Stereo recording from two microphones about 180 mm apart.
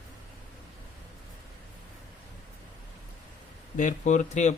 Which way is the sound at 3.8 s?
45° left (ahead or behind).